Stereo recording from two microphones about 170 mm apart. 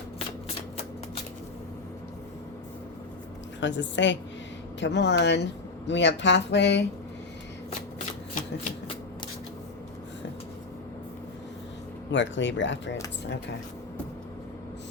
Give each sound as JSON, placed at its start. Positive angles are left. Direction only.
{"t": 3.6, "sound": "speech", "side_deg": 90}
{"t": 12.1, "sound": "speech", "side_deg": 90}